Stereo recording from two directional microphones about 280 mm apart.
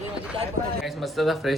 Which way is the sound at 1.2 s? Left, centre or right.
Centre.